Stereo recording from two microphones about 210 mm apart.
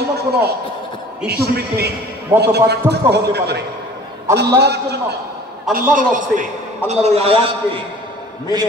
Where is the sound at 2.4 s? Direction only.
50° right (ahead or behind).